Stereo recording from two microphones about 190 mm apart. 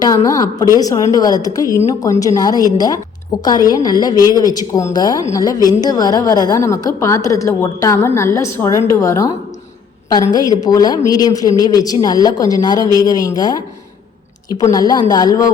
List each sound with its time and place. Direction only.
0.0 s a woman's voice: 20° left (ahead or behind)
10.3 s a woman's voice: 20° left (ahead or behind)